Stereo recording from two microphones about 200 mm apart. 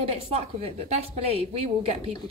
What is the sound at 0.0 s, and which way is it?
A woman's voice, 30° right (ahead or behind).